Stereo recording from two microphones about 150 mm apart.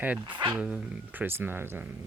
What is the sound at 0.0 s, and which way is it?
Speech, 10° right (ahead or behind).